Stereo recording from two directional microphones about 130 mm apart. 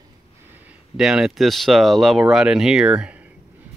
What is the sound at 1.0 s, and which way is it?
Speech, 5° right (ahead or behind).